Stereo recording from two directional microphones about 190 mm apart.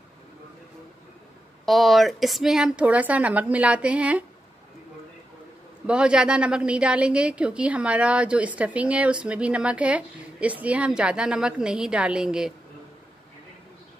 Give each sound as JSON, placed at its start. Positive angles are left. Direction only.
{"t": 1.7, "sound": "a woman's voice", "side_deg": 0}
{"t": 5.9, "sound": "a woman's voice", "side_deg": -5}